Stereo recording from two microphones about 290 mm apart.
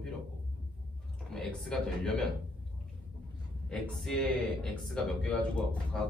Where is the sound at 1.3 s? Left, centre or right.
Centre.